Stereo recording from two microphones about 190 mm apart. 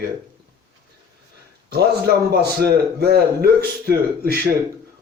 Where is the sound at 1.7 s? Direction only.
55° right (ahead or behind).